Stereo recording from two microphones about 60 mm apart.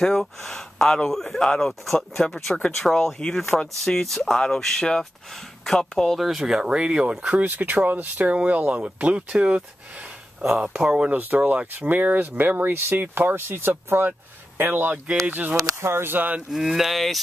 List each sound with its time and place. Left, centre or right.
0.0 s speech: centre
6.1 s speech: centre; by 7.4 s right
7.4 s speech: right
10.6 s speech: right
15.5 s speech: right
16.5 s speech: centre